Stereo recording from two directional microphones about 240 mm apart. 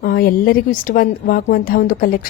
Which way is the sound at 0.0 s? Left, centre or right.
Left.